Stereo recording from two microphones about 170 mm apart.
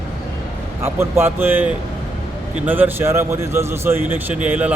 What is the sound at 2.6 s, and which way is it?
Speech, 10° right (ahead or behind).